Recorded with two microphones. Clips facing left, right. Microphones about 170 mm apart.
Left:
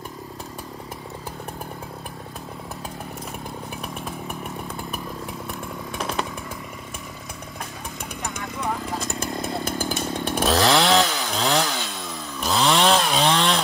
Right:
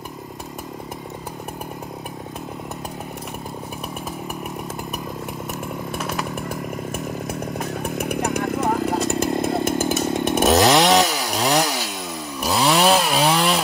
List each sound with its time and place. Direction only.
7.8 s chainsaw: 60° right (ahead or behind); by 8.8 s 45° right (ahead or behind)
8.9 s chainsaw: 35° right (ahead or behind); by 13.6 s 5° right (ahead or behind)